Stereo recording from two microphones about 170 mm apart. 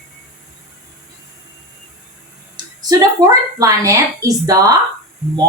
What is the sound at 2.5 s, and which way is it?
A woman's voice, 20° right (ahead or behind).